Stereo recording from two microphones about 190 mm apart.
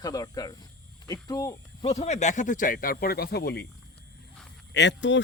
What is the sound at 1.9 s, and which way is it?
Speech, 35° left (ahead or behind).